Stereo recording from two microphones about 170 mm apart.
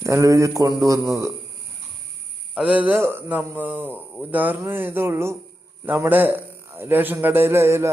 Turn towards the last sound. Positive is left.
turn(degrees=-15)  # may be behind; listen again after turning